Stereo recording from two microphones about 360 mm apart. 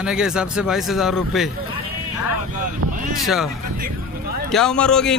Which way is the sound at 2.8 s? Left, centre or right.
Right.